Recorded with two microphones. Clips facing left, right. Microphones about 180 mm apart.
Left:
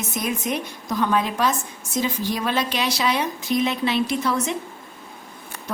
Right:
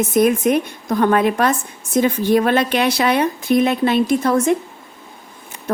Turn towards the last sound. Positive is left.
turn(degrees=-50)  # may be behind; listen again after turning